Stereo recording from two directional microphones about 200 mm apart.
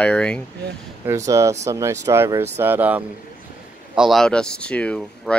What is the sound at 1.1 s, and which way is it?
Speech, 15° right (ahead or behind).